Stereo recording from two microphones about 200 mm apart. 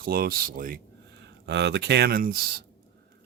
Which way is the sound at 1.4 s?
60° right (ahead or behind).